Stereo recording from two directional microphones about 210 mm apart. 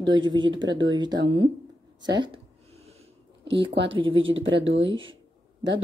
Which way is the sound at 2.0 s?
20° right (ahead or behind).